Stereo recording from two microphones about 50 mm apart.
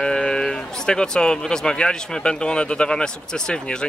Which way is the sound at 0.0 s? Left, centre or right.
Centre.